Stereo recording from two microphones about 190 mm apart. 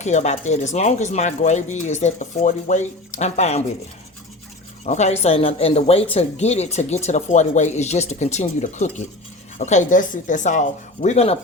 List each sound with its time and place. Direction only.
0.0 s speech: 35° left (ahead or behind)
4.9 s speech: 35° left (ahead or behind)